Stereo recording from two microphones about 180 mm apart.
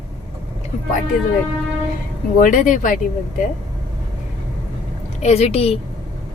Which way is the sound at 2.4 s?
45° left (ahead or behind).